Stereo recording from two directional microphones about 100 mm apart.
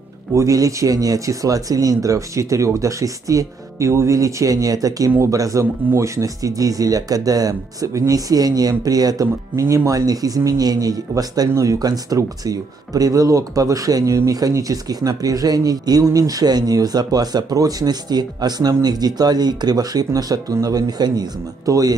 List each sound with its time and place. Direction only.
0.3 s speech: 35° right (ahead or behind)